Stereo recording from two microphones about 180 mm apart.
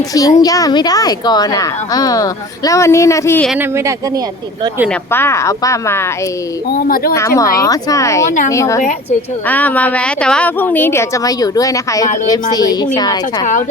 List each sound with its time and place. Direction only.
0.1 s a woman's voice: 20° left (ahead or behind)
4.9 s speech: 10° left (ahead or behind)
6.7 s speech: 50° left (ahead or behind)
7.1 s a woman's voice: 15° left (ahead or behind)
13.4 s speech: 45° left (ahead or behind)